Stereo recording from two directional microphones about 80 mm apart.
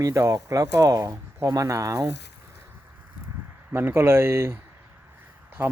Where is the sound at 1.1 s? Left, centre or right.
Right.